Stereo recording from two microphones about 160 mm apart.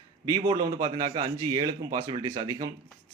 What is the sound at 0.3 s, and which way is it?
A man's voice, 25° right (ahead or behind).